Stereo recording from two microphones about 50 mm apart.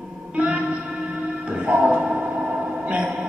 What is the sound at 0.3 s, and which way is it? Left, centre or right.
Music, right.